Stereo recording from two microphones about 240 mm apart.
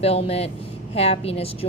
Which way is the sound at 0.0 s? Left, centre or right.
Left.